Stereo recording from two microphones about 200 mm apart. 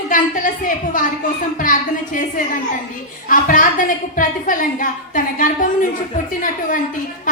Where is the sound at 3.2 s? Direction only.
40° left (ahead or behind).